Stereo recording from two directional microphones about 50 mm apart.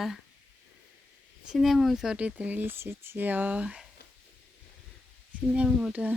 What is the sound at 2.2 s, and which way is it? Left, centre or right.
Speech, right.